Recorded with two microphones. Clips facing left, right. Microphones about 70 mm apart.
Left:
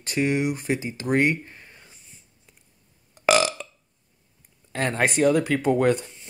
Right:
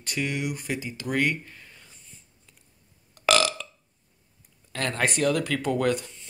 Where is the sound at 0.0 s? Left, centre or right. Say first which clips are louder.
Left 6 dB; left.